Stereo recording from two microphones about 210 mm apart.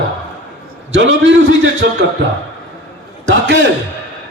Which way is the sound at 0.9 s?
60° right (ahead or behind).